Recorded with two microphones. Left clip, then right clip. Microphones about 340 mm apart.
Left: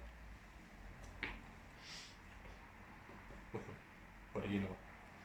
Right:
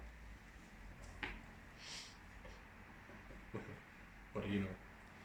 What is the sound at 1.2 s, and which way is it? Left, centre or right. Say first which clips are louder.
Finger snapping: left 1 dB; centre.